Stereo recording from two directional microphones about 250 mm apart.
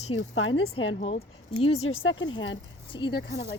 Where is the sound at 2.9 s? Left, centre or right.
Centre.